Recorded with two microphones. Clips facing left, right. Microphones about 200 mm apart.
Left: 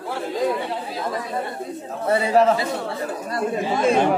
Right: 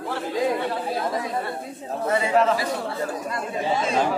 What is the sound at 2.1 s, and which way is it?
Speech, 35° left (ahead or behind).